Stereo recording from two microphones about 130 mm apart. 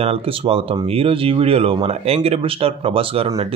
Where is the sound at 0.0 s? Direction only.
50° right (ahead or behind).